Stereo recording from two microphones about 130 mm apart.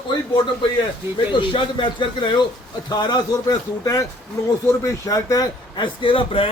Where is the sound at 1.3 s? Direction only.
40° left (ahead or behind).